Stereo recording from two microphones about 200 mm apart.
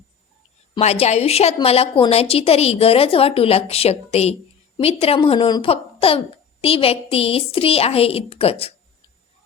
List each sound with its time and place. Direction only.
0.7 s a woman's voice: 30° left (ahead or behind)